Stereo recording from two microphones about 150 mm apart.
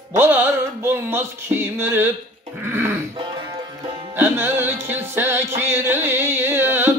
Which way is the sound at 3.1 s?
30° right (ahead or behind).